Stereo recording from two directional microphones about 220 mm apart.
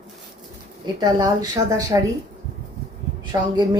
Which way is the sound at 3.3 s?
15° right (ahead or behind).